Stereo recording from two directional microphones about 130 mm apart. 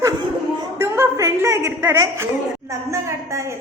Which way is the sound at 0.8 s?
20° right (ahead or behind).